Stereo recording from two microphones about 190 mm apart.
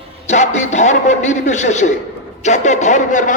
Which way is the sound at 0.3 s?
40° left (ahead or behind).